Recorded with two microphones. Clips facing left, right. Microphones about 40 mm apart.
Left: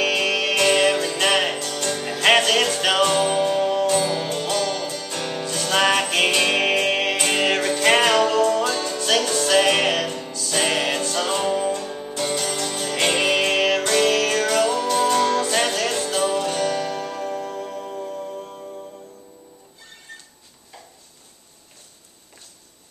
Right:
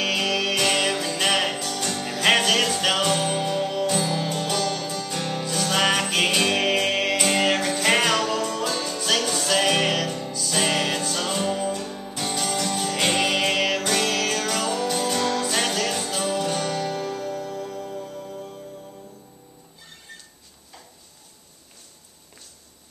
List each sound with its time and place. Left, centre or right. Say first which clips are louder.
0.0 s music: left 3 dB; centre
17.2 s music: left 2 dB; centre